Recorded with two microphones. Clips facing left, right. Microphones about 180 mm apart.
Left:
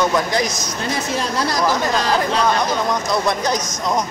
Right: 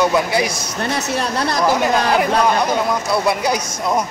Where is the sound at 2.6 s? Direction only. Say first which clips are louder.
Right 2 dB; 5° right (ahead or behind).